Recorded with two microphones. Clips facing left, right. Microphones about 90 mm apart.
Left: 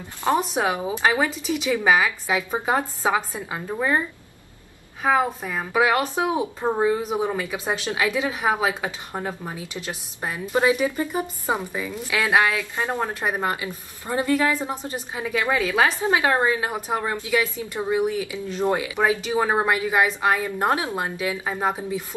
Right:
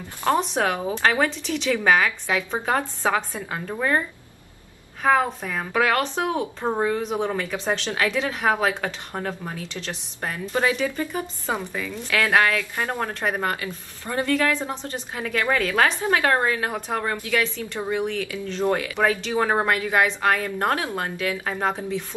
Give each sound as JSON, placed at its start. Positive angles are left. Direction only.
{"t": 0.2, "sound": "a woman's voice", "side_deg": 20}
{"t": 5.0, "sound": "a woman's voice", "side_deg": 5}